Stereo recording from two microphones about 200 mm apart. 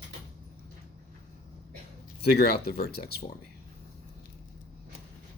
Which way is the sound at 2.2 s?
50° left (ahead or behind).